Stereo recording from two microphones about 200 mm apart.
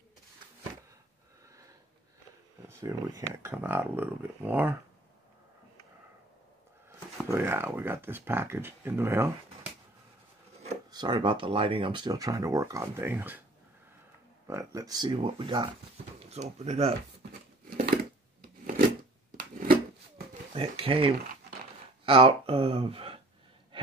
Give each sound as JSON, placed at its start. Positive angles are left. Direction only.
{"t": 2.7, "sound": "speech", "side_deg": -15}
{"t": 7.2, "sound": "speech", "side_deg": -10}
{"t": 10.9, "sound": "speech", "side_deg": -20}
{"t": 14.5, "sound": "speech", "side_deg": -15}
{"t": 17.6, "sound": "a sound", "side_deg": -45}
{"t": 19.3, "sound": "a sound", "side_deg": -45}
{"t": 20.5, "sound": "speech", "side_deg": -30}